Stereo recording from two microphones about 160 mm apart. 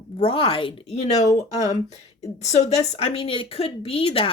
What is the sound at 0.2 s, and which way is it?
A woman's voice, 35° left (ahead or behind).